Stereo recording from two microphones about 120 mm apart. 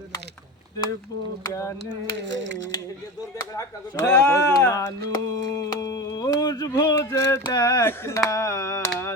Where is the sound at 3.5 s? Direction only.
30° left (ahead or behind).